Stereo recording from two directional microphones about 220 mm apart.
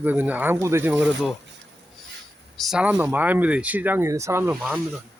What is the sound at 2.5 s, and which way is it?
Speech, centre (ahead or behind).